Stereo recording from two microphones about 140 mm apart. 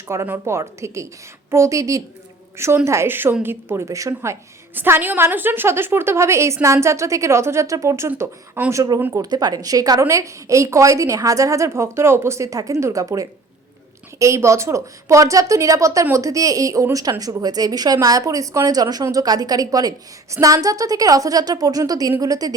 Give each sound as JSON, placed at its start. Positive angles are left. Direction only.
{"t": 0.1, "sound": "a woman's voice", "side_deg": -20}
{"t": 9.2, "sound": "a woman's voice", "side_deg": -30}